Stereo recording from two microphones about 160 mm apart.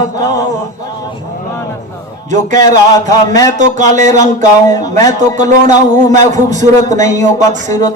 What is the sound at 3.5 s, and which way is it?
A man's voice, 50° right (ahead or behind).